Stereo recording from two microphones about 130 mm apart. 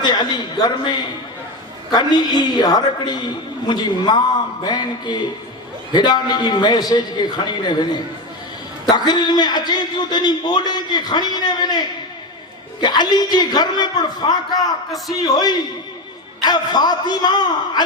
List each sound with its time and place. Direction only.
0.0 s a man's voice: 35° left (ahead or behind)
8.9 s a man's voice: 35° left (ahead or behind)